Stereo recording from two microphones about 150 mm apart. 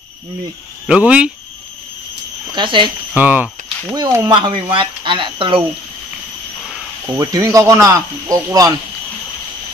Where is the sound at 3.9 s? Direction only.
25° right (ahead or behind).